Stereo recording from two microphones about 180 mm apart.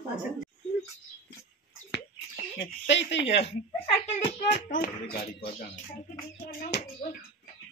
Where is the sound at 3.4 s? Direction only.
35° left (ahead or behind).